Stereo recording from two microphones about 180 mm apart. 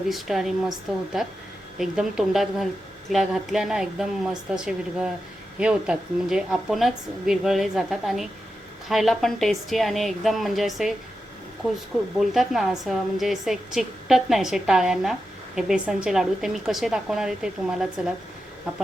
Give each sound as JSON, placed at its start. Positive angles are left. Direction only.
{"t": 0.1, "sound": "a woman's voice", "side_deg": 0}
{"t": 12.2, "sound": "a woman's voice", "side_deg": 0}